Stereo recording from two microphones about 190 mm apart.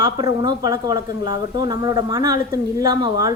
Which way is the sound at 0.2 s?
20° right (ahead or behind).